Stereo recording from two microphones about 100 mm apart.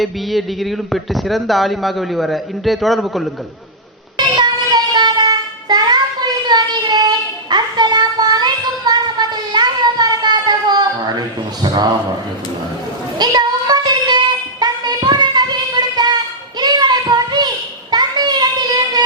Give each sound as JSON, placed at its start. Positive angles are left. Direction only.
{"t": 0.0, "sound": "speech", "side_deg": 0}
{"t": 4.4, "sound": "child singing", "side_deg": -45}
{"t": 13.1, "sound": "child singing", "side_deg": -45}